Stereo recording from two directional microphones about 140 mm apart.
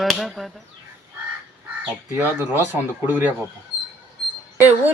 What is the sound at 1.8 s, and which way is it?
A child's voice, 10° right (ahead or behind).